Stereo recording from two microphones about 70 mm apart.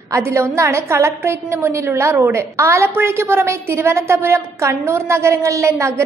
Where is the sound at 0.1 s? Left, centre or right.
Right.